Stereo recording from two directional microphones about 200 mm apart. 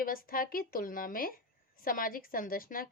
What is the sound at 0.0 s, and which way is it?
A woman's voice, 45° left (ahead or behind).